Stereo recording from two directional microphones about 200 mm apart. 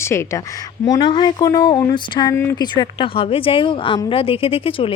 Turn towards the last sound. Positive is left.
turn(degrees=25)  # may be behind; listen again after turning